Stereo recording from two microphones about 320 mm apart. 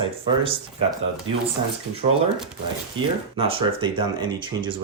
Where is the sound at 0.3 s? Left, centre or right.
Centre.